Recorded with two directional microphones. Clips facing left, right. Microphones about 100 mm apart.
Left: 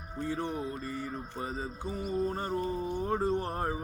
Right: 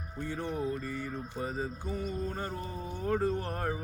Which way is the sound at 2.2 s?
30° left (ahead or behind).